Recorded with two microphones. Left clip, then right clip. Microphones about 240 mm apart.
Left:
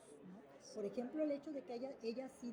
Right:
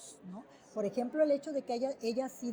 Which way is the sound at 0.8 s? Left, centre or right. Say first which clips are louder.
Right 11 dB; right.